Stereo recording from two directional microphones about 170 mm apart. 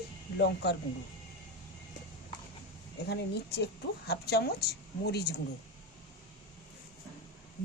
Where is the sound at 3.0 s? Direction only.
75° left (ahead or behind).